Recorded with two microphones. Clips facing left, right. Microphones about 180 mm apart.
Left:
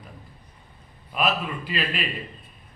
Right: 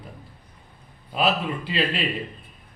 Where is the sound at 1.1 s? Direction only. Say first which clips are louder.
Right 2 dB; 30° right (ahead or behind).